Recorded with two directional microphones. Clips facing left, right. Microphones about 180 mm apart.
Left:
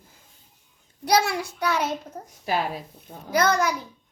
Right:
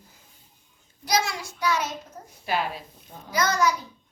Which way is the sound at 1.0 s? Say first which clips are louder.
Left 4 dB; 65° left (ahead or behind).